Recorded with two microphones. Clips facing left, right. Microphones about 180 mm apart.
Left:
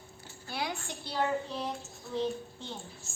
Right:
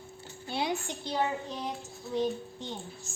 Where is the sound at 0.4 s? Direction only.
20° right (ahead or behind).